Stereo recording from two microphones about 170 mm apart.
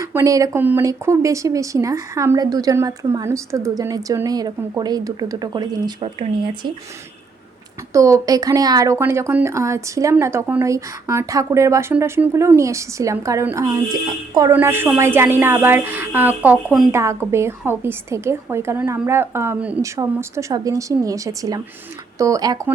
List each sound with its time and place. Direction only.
0.0 s speech: 15° right (ahead or behind)
7.9 s a woman's voice: 20° right (ahead or behind)
16.9 s a woman's voice: 15° right (ahead or behind)